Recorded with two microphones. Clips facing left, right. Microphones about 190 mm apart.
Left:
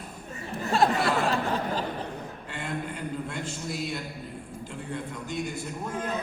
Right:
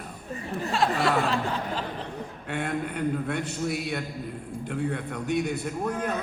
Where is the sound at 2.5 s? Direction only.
60° right (ahead or behind).